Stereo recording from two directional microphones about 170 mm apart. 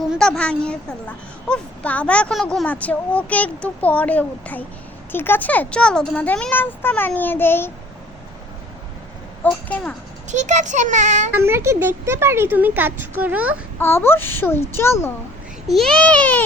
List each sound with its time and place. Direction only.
0.1 s speech: 5° left (ahead or behind)
9.4 s speech: 10° left (ahead or behind)
10.2 s speech: 45° right (ahead or behind)
11.3 s speech: 15° right (ahead or behind)
13.7 s speech: 15° left (ahead or behind)
15.6 s speech: centre (ahead or behind)